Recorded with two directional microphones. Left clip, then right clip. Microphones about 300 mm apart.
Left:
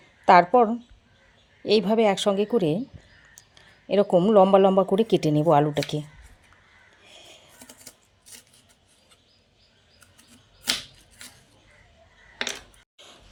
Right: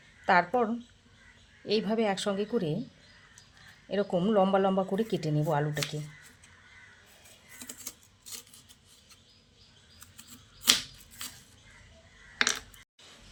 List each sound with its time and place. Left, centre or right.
0.3 s speech: centre
3.8 s speech: centre